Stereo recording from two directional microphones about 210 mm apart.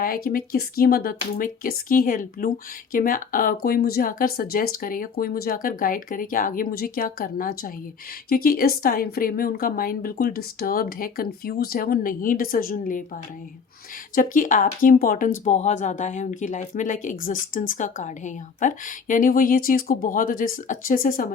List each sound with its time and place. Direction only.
0.0 s speech: 45° left (ahead or behind)
14.2 s speech: 40° left (ahead or behind)